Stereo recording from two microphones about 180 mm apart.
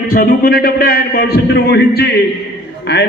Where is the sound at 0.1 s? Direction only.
55° left (ahead or behind).